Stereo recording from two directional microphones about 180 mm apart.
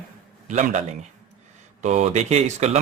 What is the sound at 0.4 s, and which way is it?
Speech, 40° right (ahead or behind).